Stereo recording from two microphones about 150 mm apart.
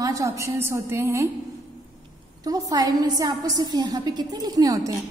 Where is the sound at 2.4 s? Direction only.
25° right (ahead or behind).